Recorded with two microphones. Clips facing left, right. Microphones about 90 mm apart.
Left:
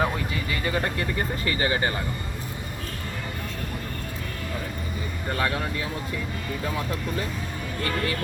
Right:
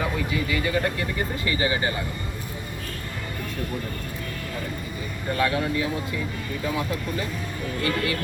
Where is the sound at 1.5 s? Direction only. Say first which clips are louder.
Right 1 dB; 40° left (ahead or behind).